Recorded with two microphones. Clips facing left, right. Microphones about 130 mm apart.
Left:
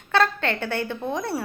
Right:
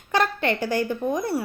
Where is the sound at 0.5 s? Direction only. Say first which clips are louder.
Right 3 dB; 65° left (ahead or behind).